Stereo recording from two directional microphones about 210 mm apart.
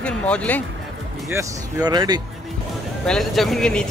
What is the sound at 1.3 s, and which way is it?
Speech, 20° right (ahead or behind).